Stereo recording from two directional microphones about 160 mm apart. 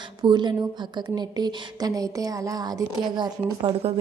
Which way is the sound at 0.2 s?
30° right (ahead or behind).